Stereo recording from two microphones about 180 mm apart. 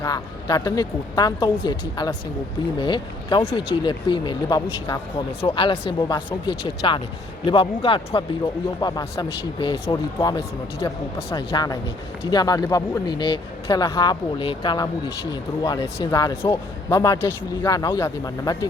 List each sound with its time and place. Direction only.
0.0 s a man's voice: 20° left (ahead or behind)